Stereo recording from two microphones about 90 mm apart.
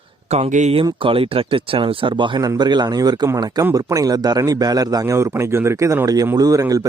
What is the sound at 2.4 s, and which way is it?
A man's voice, 50° right (ahead or behind).